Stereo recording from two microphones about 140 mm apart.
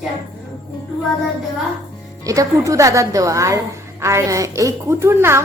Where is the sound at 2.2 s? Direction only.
25° right (ahead or behind).